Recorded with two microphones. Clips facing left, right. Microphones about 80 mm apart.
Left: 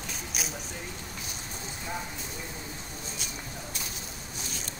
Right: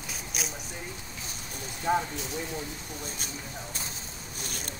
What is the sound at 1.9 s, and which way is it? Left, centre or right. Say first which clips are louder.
Speech: right 11 dB; right.